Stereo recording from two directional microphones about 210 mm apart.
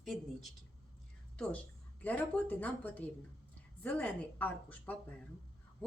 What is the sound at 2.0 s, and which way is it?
A woman's voice, 5° left (ahead or behind).